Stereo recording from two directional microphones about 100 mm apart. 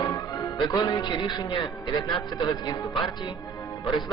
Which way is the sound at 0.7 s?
35° left (ahead or behind).